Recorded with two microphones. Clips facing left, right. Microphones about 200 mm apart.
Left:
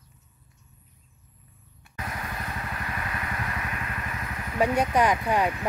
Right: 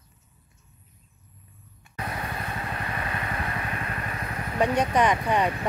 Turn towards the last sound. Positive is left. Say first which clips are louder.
# even
turn(degrees=5)  # may be behind; listen again after turning